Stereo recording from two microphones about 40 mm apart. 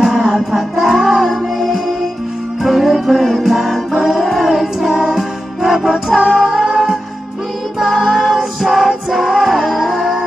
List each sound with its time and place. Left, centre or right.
0.1 s music: centre
3.4 s music: centre
6.4 s music: right
8.0 s music: centre
8.3 s music: centre